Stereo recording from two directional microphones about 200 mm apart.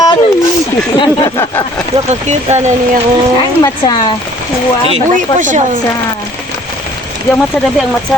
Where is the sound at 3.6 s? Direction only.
20° left (ahead or behind).